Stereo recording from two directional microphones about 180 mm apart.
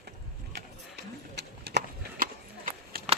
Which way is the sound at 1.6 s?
65° right (ahead or behind).